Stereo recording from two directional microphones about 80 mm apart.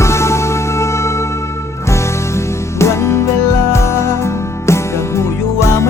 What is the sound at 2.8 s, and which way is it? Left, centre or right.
Music, left.